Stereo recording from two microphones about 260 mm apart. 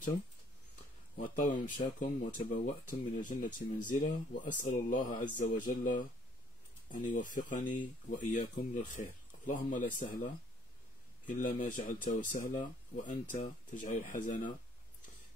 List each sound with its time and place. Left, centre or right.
1.1 s speech: left